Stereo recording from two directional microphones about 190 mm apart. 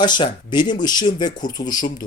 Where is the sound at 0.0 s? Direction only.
25° left (ahead or behind).